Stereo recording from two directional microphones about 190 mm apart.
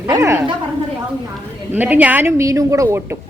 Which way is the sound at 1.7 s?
10° right (ahead or behind).